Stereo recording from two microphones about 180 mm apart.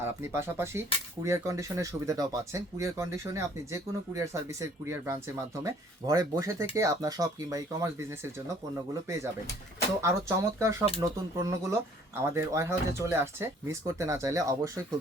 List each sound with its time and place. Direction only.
0.0 s speech: 15° right (ahead or behind)